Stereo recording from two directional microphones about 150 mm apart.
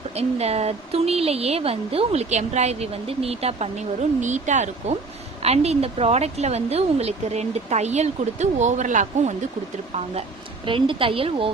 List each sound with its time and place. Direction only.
0.1 s speech: 45° right (ahead or behind)
9.9 s a woman's voice: 40° right (ahead or behind)